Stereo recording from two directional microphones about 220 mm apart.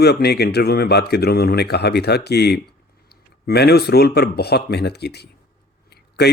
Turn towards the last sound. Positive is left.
turn(degrees=50)  # may be behind; listen again after turning